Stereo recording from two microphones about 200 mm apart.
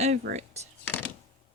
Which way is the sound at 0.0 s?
35° right (ahead or behind).